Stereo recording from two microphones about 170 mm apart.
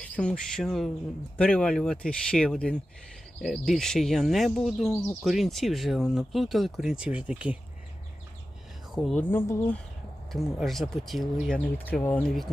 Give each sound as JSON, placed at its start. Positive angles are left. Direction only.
{"t": 0.0, "sound": "speech", "side_deg": 5}
{"t": 8.9, "sound": "speech", "side_deg": 0}
{"t": 10.3, "sound": "speech", "side_deg": 0}